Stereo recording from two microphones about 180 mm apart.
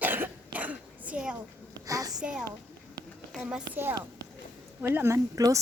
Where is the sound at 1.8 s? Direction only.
20° right (ahead or behind).